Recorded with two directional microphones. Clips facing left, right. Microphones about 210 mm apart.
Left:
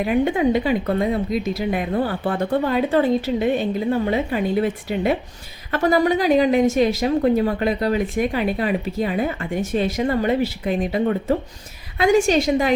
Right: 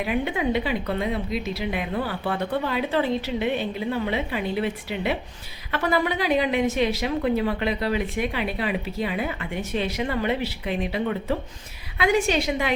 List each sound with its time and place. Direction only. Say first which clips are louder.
0.0 s a woman's voice: left 6 dB; 45° left (ahead or behind)